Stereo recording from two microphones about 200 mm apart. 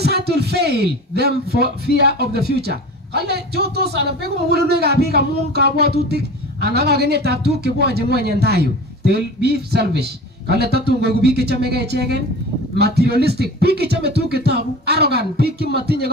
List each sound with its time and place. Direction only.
0.0 s a man's voice: 55° right (ahead or behind)